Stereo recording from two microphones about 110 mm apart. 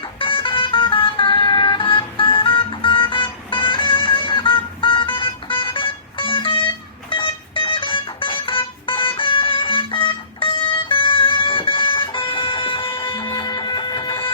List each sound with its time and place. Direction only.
0.0 s music: 50° left (ahead or behind)